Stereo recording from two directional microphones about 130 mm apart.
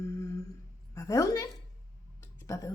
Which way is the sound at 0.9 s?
25° left (ahead or behind).